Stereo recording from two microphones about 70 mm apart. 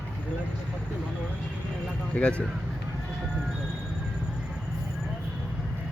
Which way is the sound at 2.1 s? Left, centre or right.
Centre.